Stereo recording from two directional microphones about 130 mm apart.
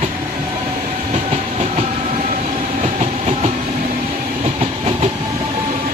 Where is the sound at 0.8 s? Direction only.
55° right (ahead or behind).